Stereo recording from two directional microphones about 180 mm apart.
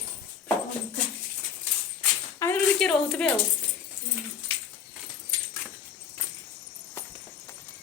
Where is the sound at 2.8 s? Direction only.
5° left (ahead or behind).